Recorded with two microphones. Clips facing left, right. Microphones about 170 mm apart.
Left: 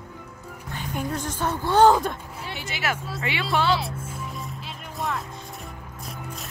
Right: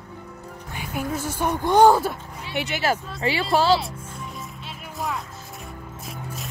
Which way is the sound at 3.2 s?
35° right (ahead or behind).